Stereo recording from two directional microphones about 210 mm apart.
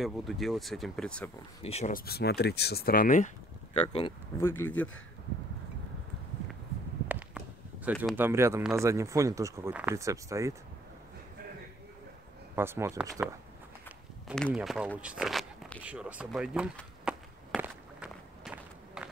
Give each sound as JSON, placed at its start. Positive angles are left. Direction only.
{"t": 0.0, "sound": "speech", "side_deg": 0}
{"t": 1.6, "sound": "speech", "side_deg": 30}
{"t": 3.7, "sound": "speech", "side_deg": 30}
{"t": 4.4, "sound": "speech", "side_deg": 10}
{"t": 7.1, "sound": "a sound", "side_deg": -5}
{"t": 8.7, "sound": "speech", "side_deg": -15}
{"t": 12.5, "sound": "speech", "side_deg": -10}
{"t": 17.6, "sound": "walk", "side_deg": -5}